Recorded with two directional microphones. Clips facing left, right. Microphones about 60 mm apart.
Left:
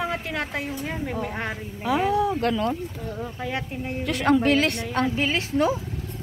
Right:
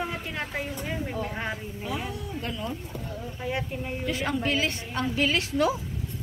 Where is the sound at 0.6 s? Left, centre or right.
Left.